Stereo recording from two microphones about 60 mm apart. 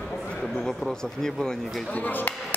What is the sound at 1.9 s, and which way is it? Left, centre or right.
Speech, left.